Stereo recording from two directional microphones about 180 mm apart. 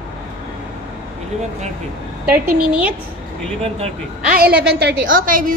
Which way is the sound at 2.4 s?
55° right (ahead or behind).